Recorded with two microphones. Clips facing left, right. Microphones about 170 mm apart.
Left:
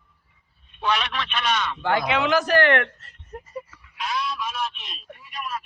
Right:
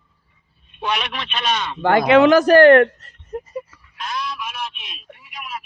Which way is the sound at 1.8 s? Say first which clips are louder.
Right 13 dB; 55° right (ahead or behind).